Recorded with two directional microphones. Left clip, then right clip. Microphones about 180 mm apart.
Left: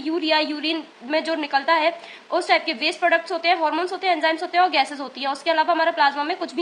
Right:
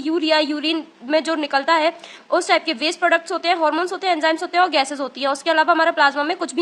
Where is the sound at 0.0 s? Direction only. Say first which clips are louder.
Right 3 dB; 35° right (ahead or behind).